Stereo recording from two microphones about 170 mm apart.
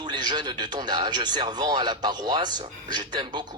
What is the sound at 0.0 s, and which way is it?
Speech, 25° right (ahead or behind).